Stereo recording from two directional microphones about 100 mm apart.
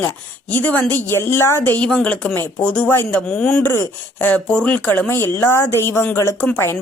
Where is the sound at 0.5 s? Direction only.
15° left (ahead or behind).